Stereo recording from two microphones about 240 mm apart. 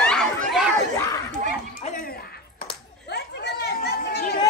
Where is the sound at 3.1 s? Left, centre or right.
Left.